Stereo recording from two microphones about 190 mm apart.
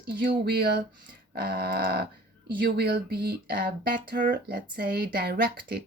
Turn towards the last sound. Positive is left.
turn(degrees=-55)  # may be behind; listen again after turning